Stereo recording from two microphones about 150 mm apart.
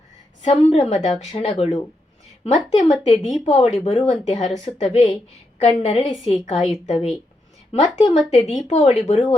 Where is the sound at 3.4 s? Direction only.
45° left (ahead or behind).